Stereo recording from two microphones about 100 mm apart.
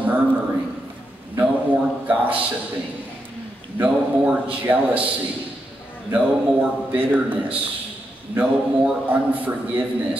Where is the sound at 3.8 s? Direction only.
15° right (ahead or behind).